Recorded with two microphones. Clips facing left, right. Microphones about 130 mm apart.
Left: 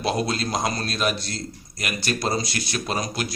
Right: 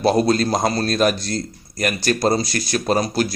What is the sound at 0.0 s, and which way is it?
A man's voice, 40° right (ahead or behind).